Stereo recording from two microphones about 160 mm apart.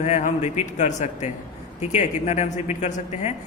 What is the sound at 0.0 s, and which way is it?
Speech, 50° left (ahead or behind).